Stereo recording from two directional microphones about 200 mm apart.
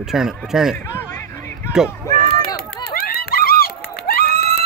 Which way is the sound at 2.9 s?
50° left (ahead or behind).